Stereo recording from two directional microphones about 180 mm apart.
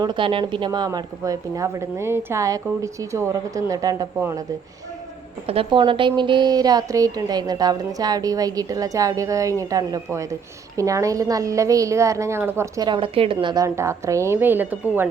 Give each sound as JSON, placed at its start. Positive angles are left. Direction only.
{"t": 0.0, "sound": "a woman's voice", "side_deg": -25}
{"t": 5.5, "sound": "a woman's voice", "side_deg": -30}